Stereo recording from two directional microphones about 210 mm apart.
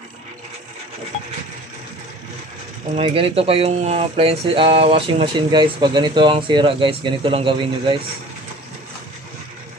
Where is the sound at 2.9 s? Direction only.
30° right (ahead or behind).